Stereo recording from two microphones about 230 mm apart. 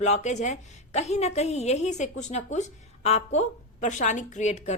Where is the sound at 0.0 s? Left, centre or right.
Left.